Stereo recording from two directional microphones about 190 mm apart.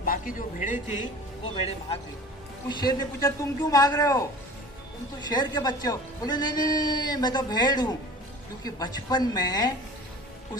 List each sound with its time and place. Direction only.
0.0 s a man's voice: 45° left (ahead or behind)
2.6 s speech: 20° left (ahead or behind)
5.3 s a man's voice: 20° left (ahead or behind)